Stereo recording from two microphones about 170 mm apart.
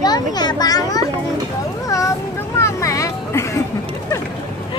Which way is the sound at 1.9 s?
20° left (ahead or behind).